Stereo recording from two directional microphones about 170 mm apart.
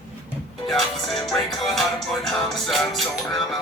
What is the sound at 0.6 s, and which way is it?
Music, centre (ahead or behind).